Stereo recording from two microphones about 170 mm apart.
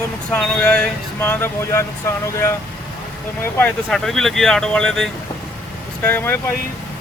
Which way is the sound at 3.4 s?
5° left (ahead or behind).